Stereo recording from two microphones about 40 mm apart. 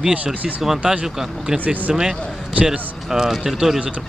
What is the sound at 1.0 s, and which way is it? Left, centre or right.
Speech, centre.